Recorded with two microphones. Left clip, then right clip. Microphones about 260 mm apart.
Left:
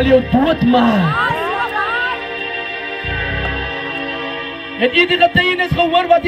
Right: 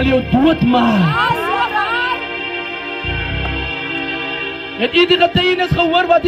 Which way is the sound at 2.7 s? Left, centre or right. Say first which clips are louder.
Even; left.